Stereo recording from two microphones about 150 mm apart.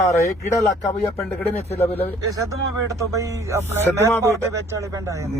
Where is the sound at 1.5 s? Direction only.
45° left (ahead or behind).